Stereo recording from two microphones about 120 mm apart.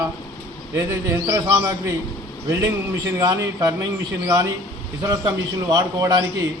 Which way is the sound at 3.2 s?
30° right (ahead or behind).